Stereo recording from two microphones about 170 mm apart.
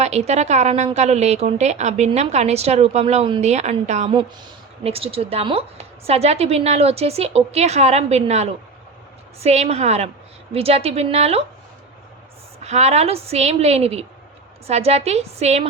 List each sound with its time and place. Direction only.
0.0 s a woman's voice: 40° right (ahead or behind)
12.6 s a woman's voice: 40° right (ahead or behind)